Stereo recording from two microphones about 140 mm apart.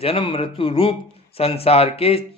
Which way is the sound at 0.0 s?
40° left (ahead or behind).